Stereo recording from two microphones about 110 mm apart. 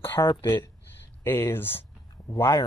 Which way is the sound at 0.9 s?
20° left (ahead or behind).